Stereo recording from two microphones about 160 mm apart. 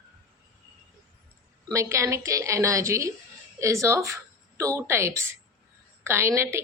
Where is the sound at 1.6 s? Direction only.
20° right (ahead or behind).